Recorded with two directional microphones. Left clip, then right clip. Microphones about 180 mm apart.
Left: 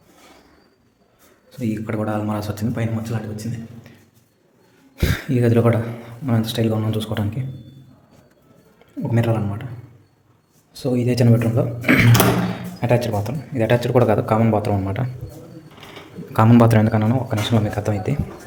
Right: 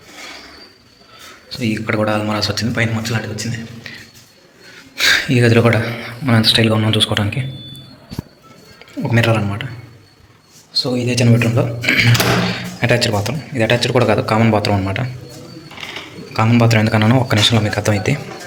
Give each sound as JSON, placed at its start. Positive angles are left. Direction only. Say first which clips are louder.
{"t": 1.5, "sound": "speech", "louder": "right 7 dB", "side_deg": 15}
{"t": 4.9, "sound": "speech", "louder": "right 10 dB", "side_deg": 10}
{"t": 9.1, "sound": "speech", "louder": "right 7 dB", "side_deg": 10}
{"t": 10.8, "sound": "a man's voice", "louder": "left 1 dB", "side_deg": 35}
{"t": 11.3, "sound": "speech", "louder": "right 4 dB", "side_deg": 20}
{"t": 12.8, "sound": "speech", "louder": "right 4 dB", "side_deg": 5}
{"t": 16.3, "sound": "a man's voice", "louder": "even", "side_deg": 40}
{"t": 16.9, "sound": "speech", "louder": "right 7 dB", "side_deg": 10}